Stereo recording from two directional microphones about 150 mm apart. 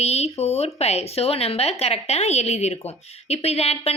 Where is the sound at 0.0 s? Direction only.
45° left (ahead or behind).